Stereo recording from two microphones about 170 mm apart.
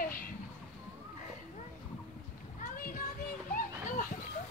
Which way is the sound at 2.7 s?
55° left (ahead or behind).